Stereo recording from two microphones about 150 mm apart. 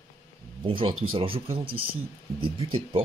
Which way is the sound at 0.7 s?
35° right (ahead or behind).